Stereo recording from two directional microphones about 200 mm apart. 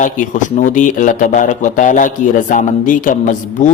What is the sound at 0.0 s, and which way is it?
A man's voice, 40° left (ahead or behind).